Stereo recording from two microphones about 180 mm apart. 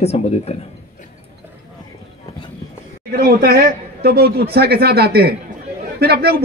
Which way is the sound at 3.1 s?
60° right (ahead or behind).